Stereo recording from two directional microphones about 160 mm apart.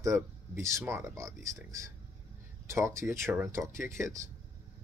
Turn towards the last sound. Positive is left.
turn(degrees=-15)  # may be behind; listen again after turning